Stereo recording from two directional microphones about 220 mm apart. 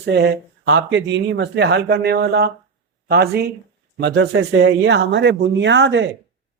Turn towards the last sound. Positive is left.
turn(degrees=-55)  # may be behind; listen again after turning